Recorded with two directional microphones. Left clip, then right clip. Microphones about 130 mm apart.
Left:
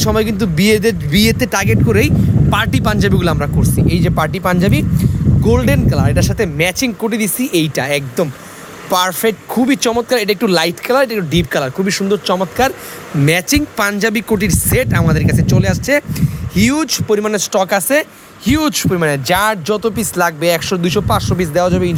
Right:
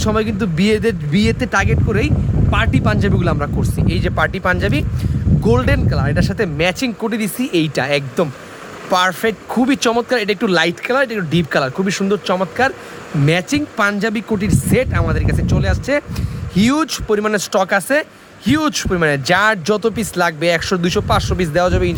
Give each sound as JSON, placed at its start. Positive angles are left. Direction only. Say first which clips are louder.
{"t": 0.0, "sound": "a man's voice", "louder": "left 3 dB", "side_deg": 20}
{"t": 3.6, "sound": "speech", "louder": "left 4 dB", "side_deg": 5}
{"t": 5.6, "sound": "speech", "louder": "left 3 dB", "side_deg": 15}
{"t": 13.2, "sound": "speech", "louder": "left 3 dB", "side_deg": 30}
{"t": 16.1, "sound": "speech", "louder": "left 3 dB", "side_deg": 5}